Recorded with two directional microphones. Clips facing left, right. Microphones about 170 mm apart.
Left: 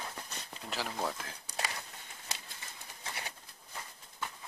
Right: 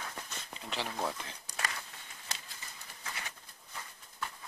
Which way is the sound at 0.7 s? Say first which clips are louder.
Even; centre (ahead or behind).